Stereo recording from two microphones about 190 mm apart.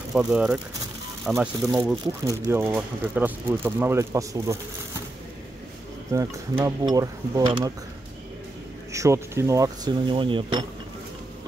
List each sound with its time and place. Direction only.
0.1 s speech: 5° right (ahead or behind)
2.2 s speech: 15° right (ahead or behind)
6.6 s mechanisms: 20° right (ahead or behind)
8.9 s speech: 15° right (ahead or behind)